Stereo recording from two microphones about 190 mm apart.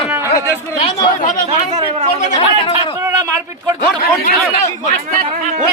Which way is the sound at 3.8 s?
45° left (ahead or behind).